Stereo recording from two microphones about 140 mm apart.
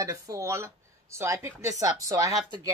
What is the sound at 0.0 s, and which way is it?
Speech, 25° right (ahead or behind).